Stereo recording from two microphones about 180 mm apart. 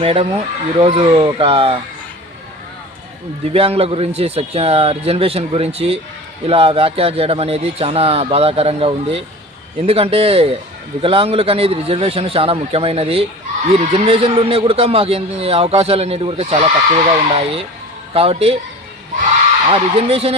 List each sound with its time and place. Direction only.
0.0 s a man's voice: 30° right (ahead or behind)
3.4 s a man's voice: 35° right (ahead or behind)
19.7 s a man's voice: 35° right (ahead or behind)